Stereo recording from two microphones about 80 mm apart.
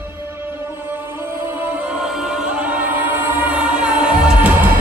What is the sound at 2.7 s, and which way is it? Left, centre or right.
Music, right.